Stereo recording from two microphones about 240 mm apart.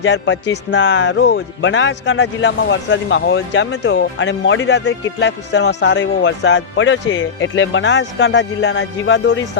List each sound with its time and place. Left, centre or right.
0.0 s speech: left